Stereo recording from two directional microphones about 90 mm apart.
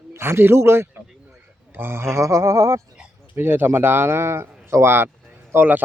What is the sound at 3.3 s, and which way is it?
Speech, 25° right (ahead or behind).